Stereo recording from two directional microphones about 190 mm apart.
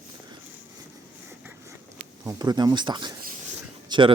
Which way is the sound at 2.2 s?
20° right (ahead or behind).